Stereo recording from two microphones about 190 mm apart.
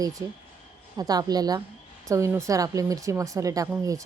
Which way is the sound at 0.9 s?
20° right (ahead or behind).